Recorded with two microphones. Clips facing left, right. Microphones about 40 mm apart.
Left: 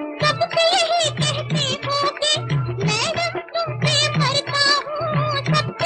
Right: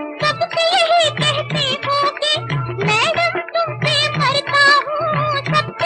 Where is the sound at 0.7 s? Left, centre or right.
Right; by 2.6 s centre.